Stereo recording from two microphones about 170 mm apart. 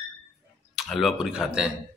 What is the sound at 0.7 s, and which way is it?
Speech, centre (ahead or behind).